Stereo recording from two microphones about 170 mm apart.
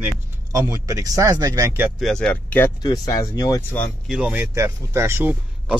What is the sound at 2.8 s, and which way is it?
Speech, 20° left (ahead or behind).